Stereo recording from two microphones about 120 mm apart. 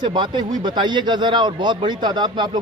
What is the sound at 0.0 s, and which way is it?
Speech, 40° right (ahead or behind).